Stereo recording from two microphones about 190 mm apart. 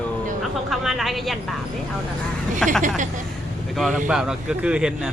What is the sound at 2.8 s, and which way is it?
Speech, 40° right (ahead or behind).